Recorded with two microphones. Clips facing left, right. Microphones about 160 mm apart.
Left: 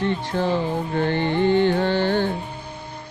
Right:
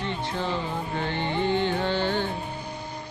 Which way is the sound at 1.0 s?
55° left (ahead or behind).